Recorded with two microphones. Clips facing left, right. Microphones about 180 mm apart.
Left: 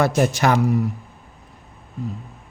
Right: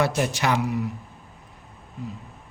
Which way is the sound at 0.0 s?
45° left (ahead or behind).